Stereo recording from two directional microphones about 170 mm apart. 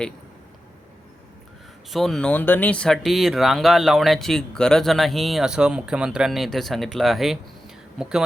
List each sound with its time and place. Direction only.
1.9 s speech: centre (ahead or behind)